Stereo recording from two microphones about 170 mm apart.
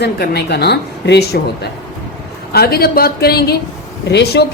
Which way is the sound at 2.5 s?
65° left (ahead or behind).